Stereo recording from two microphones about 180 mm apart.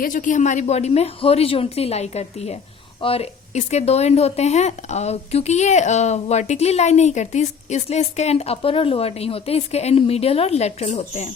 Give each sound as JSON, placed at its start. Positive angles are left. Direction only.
{"t": 0.0, "sound": "speech", "side_deg": 45}